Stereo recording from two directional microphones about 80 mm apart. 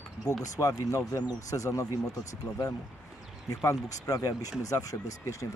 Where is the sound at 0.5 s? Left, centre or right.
Left.